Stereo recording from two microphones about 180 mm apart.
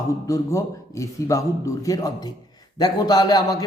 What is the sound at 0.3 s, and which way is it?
A man's voice, 15° left (ahead or behind).